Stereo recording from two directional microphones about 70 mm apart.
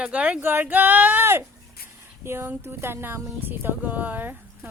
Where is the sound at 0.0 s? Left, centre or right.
Centre.